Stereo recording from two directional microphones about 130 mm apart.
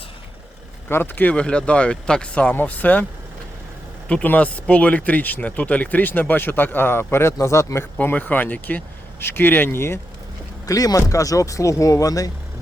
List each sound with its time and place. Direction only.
0.9 s speech: 15° left (ahead or behind)
4.1 s speech: 10° left (ahead or behind)
7.9 s speech: 10° left (ahead or behind)